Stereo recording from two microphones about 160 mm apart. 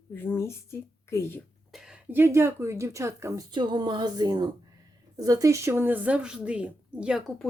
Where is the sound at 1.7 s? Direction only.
5° right (ahead or behind).